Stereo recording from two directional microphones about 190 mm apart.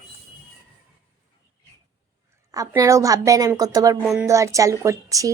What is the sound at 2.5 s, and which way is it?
Speech, 15° right (ahead or behind).